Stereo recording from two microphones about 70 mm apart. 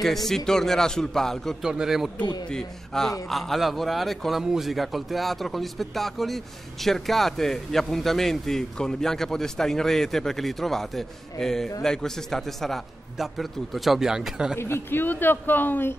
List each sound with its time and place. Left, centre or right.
0.0 s a man's voice: centre
1.6 s speech: centre
2.5 s a man's voice: centre
14.6 s speech: left